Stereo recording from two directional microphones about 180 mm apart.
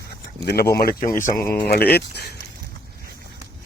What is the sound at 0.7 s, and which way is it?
Speech, 55° left (ahead or behind).